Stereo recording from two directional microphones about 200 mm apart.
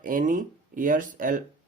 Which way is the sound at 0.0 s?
40° right (ahead or behind).